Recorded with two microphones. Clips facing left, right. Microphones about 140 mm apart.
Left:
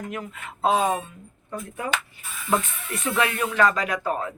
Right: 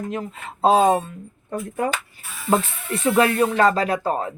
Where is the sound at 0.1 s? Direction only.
30° right (ahead or behind).